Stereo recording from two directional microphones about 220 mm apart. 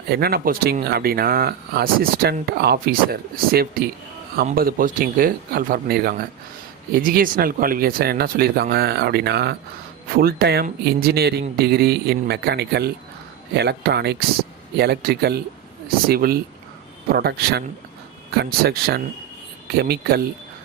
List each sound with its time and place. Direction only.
0.1 s speech: 45° right (ahead or behind)